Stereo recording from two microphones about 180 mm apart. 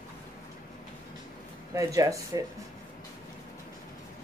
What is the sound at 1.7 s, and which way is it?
Speech, 20° right (ahead or behind).